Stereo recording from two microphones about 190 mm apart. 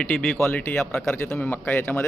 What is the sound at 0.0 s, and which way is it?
A man's voice, centre (ahead or behind).